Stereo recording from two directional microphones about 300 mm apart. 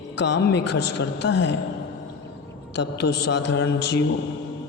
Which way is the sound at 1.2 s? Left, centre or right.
Left.